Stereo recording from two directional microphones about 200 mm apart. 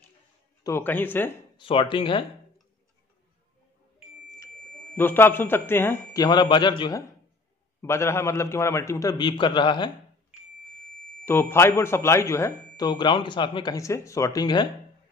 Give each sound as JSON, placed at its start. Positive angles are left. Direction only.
{"t": 0.7, "sound": "a man's voice", "side_deg": 10}
{"t": 1.6, "sound": "speech", "side_deg": 25}
{"t": 4.9, "sound": "a man's voice", "side_deg": 10}
{"t": 11.2, "sound": "a man's voice", "side_deg": 10}